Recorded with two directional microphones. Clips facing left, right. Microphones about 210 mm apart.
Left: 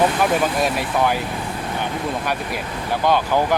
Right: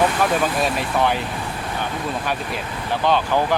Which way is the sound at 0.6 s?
10° left (ahead or behind).